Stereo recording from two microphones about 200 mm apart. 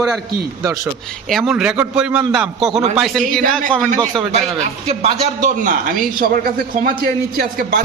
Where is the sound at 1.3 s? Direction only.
Centre (ahead or behind).